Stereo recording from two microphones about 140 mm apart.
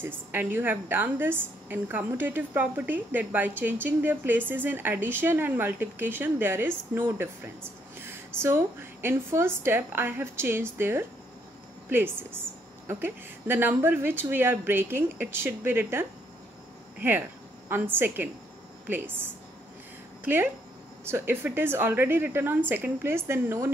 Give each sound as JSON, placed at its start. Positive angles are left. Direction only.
{"t": 0.0, "sound": "a woman's voice", "side_deg": -15}
{"t": 17.6, "sound": "a woman's voice", "side_deg": -15}
{"t": 21.0, "sound": "a woman's voice", "side_deg": -15}